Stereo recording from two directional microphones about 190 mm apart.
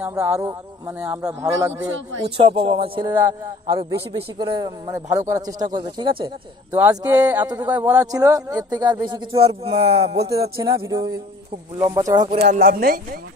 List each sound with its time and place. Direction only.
0.0 s speech: 15° right (ahead or behind)
1.4 s speech: 15° right (ahead or behind)
2.2 s speech: 30° right (ahead or behind)
3.1 s speech: 15° right (ahead or behind); by 10.1 s 35° right (ahead or behind)
10.1 s speech: 55° right (ahead or behind)
10.4 s speech: 20° right (ahead or behind)
12.4 s speech: 55° right (ahead or behind)